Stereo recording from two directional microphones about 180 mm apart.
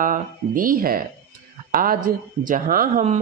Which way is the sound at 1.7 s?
50° right (ahead or behind).